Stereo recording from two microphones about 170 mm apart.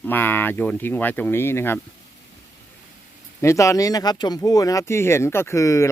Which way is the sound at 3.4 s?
20° left (ahead or behind).